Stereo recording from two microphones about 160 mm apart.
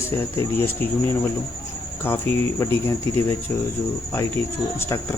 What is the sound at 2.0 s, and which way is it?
Speech, 15° left (ahead or behind).